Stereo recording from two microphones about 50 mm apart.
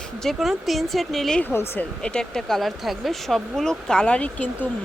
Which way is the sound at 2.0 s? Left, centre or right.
Centre.